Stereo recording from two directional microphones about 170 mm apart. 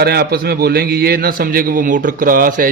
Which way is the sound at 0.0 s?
65° right (ahead or behind).